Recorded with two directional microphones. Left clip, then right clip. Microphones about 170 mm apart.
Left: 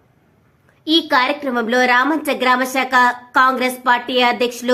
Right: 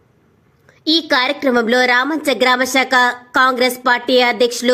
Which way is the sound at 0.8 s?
30° right (ahead or behind).